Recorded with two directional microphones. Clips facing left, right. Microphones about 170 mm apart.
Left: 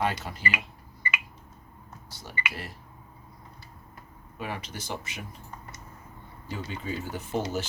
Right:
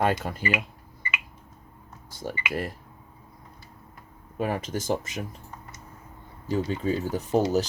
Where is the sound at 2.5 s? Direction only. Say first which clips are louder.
Right 10 dB; 50° right (ahead or behind).